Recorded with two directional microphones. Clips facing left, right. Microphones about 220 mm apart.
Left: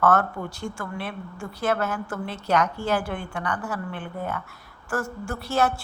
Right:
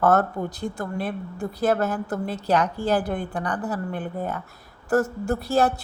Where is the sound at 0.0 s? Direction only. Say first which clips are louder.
Right 2 dB; 35° right (ahead or behind).